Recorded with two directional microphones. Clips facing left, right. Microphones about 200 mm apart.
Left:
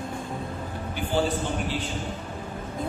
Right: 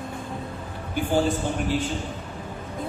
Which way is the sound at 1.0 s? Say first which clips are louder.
Right 3 dB; 45° right (ahead or behind).